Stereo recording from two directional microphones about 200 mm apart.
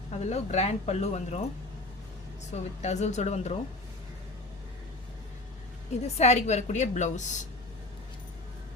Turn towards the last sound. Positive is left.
turn(degrees=40)  # may be behind; listen again after turning